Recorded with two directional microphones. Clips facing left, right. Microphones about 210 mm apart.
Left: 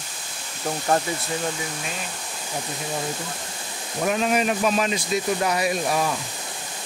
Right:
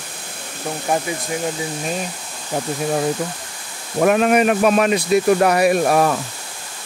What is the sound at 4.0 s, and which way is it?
Speech, 60° right (ahead or behind).